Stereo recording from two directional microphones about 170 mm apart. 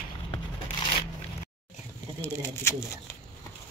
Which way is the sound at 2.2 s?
15° left (ahead or behind).